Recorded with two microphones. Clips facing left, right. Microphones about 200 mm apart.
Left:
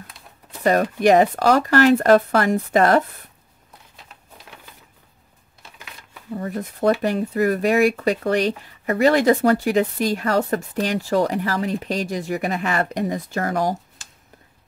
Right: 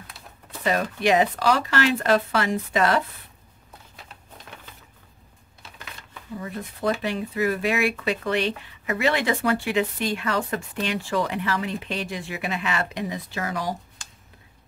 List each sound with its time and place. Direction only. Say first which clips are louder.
0.2 s a sound: right 1 dB; 5° right (ahead or behind)
1.0 s speech: left 5 dB; 45° left (ahead or behind)
6.3 s speech: left 6 dB; 45° left (ahead or behind)